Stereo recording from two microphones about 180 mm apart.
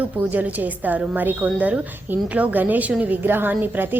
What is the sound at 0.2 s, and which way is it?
A woman's voice, 10° right (ahead or behind).